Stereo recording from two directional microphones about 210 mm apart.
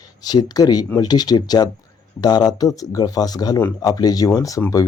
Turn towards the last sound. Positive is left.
turn(degrees=15)  # may be behind; listen again after turning